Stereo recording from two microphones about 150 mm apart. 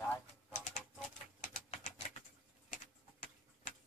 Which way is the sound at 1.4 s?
50° left (ahead or behind).